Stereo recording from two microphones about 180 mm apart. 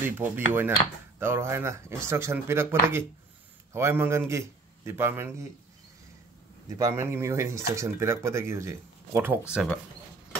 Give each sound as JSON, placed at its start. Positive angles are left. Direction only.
{"t": 0.0, "sound": "a man's voice", "side_deg": -10}
{"t": 6.8, "sound": "speech", "side_deg": -15}
{"t": 9.5, "sound": "speech", "side_deg": 0}